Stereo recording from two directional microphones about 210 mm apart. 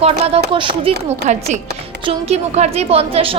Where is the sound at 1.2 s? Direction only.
35° right (ahead or behind).